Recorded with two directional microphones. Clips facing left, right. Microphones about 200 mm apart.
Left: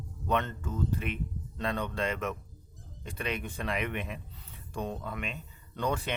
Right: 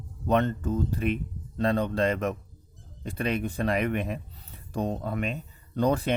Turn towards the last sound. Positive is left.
turn(degrees=-40)  # may be behind; listen again after turning